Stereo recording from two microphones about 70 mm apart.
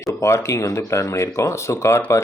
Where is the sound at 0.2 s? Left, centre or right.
Left.